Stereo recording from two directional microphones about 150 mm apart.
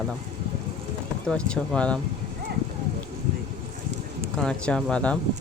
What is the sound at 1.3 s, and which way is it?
Speech, 5° left (ahead or behind).